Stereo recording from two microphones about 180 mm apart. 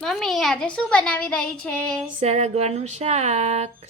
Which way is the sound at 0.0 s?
Centre (ahead or behind).